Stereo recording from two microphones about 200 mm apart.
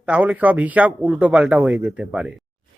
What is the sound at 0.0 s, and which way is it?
Speech, 5° right (ahead or behind).